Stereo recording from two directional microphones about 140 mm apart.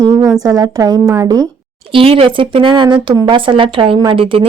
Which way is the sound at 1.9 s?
45° right (ahead or behind).